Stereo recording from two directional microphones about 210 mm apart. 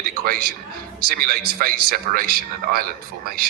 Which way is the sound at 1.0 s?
45° right (ahead or behind).